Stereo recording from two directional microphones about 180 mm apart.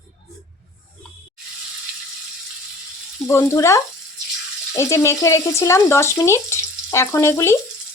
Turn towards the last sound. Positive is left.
turn(degrees=15)  # may be behind; listen again after turning